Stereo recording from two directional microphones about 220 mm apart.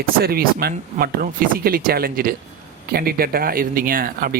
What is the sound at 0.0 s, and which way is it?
Speech, 45° right (ahead or behind).